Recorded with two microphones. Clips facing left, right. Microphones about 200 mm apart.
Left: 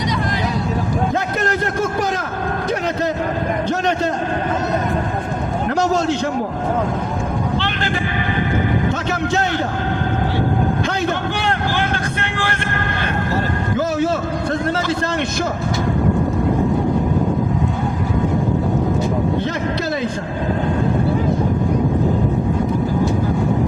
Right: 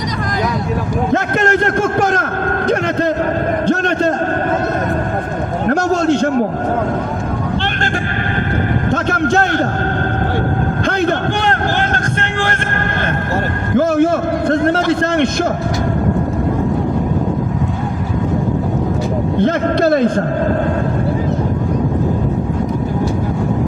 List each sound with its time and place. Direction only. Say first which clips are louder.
1.1 s a man's voice: right 5 dB; 70° right (ahead or behind); by 4.1 s 55° right (ahead or behind)
5.6 s a sound: right 4 dB; 55° right (ahead or behind)
8.9 s a man's voice: right 5 dB; 55° right (ahead or behind)
10.8 s vehicle: right 5 dB; 55° right (ahead or behind)
13.7 s a sound: right 7 dB; 55° right (ahead or behind)
19.4 s a man's voice: right 7 dB; 55° right (ahead or behind)